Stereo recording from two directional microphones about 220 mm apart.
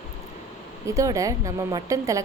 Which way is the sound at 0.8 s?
15° right (ahead or behind).